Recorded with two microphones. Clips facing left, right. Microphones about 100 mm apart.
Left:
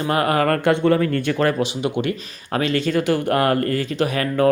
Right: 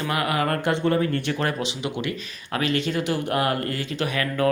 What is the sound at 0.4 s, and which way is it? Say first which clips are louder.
Speech: left 6 dB; 60° left (ahead or behind).